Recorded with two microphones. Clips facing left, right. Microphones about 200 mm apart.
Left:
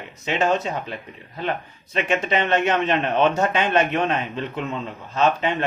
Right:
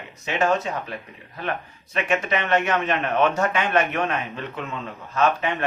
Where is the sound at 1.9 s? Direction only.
25° left (ahead or behind).